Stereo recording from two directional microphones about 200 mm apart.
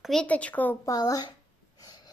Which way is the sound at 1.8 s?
20° left (ahead or behind).